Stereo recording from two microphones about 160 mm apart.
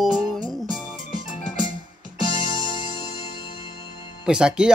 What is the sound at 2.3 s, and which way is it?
Music, 30° left (ahead or behind).